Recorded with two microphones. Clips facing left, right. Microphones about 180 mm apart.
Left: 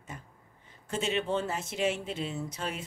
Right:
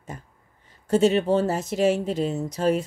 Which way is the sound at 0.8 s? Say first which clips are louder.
Right 12 dB; 40° right (ahead or behind).